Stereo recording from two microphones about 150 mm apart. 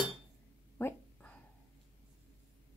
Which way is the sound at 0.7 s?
15° left (ahead or behind).